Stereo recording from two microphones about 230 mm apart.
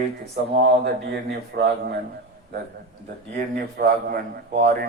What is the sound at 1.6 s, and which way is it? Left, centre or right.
Speech, right.